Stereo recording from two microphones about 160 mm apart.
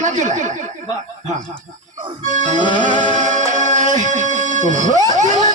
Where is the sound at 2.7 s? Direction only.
50° right (ahead or behind).